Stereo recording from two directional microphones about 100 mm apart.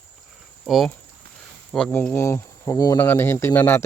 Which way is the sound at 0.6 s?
Centre (ahead or behind).